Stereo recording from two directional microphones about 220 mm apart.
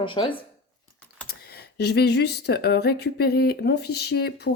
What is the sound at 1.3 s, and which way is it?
Speech, 45° left (ahead or behind).